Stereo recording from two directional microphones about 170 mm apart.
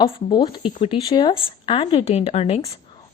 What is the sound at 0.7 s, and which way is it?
Speech, 45° left (ahead or behind).